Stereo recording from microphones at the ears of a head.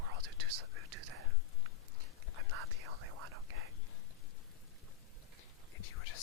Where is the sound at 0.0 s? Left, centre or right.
Right.